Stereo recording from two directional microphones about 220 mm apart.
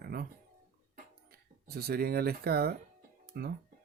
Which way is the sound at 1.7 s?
45° right (ahead or behind).